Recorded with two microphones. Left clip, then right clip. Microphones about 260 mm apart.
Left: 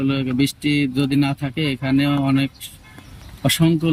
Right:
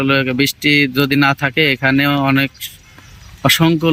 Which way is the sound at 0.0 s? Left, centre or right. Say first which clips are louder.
Right 7 dB; centre.